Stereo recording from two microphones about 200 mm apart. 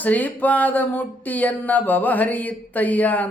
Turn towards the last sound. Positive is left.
turn(degrees=10)  # may be behind; listen again after turning